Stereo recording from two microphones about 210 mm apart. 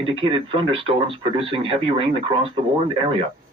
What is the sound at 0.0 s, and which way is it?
Speech, 25° right (ahead or behind).